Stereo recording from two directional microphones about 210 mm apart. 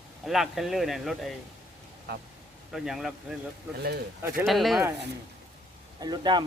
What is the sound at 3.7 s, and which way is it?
Speech, 50° right (ahead or behind).